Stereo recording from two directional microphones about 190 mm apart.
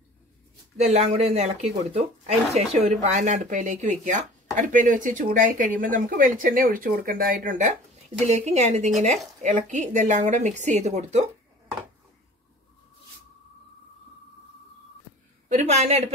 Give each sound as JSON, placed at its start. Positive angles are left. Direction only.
{"t": 0.7, "sound": "a woman's voice", "side_deg": -35}
{"t": 15.4, "sound": "a woman's voice", "side_deg": -40}